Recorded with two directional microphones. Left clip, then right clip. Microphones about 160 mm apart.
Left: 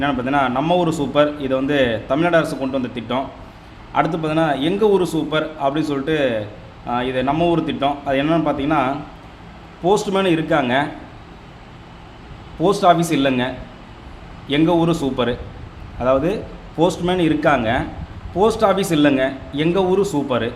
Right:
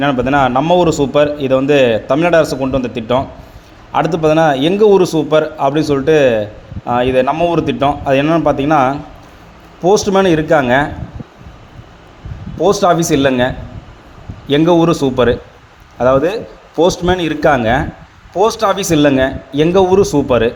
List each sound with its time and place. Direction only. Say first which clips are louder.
0.0 s a man's voice: right 6 dB; 45° right (ahead or behind)
12.6 s a man's voice: right 3 dB; 40° right (ahead or behind)